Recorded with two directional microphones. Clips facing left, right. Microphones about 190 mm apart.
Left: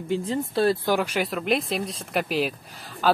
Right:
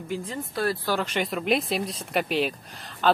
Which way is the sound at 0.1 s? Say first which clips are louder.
Left 6 dB; 30° left (ahead or behind).